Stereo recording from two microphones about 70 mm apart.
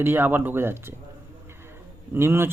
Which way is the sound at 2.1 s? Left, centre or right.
Right.